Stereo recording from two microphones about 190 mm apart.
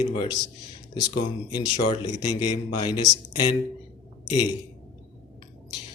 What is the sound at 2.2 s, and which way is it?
Speech, 20° left (ahead or behind).